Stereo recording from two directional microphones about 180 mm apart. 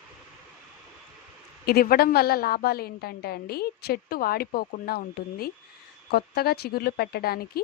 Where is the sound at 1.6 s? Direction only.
55° left (ahead or behind).